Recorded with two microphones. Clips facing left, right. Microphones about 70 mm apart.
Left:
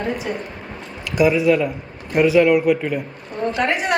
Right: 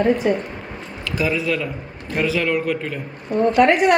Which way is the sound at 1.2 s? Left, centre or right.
Centre.